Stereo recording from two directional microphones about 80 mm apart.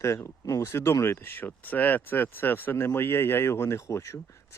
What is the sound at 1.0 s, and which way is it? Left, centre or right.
Speech, left.